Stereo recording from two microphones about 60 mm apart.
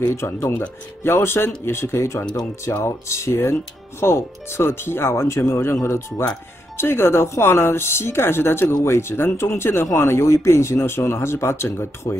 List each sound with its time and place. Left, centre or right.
0.0 s speech: left
6.8 s speech: left